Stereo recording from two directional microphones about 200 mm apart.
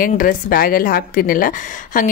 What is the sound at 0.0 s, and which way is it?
A woman's voice, 45° left (ahead or behind).